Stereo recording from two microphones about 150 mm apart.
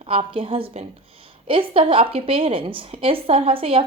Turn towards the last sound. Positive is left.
turn(degrees=-40)  # may be behind; listen again after turning